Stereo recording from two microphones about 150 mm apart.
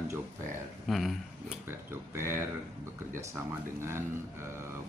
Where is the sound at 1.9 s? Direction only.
15° right (ahead or behind).